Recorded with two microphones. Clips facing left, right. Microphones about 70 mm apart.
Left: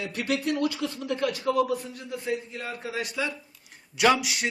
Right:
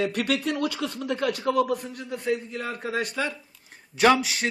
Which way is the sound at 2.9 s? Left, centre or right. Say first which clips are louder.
Right 2 dB; right.